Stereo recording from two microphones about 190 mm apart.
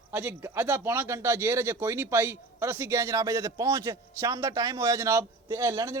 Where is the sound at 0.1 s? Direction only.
10° right (ahead or behind).